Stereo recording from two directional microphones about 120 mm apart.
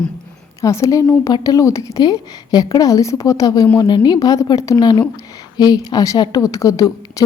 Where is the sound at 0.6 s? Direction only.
25° left (ahead or behind).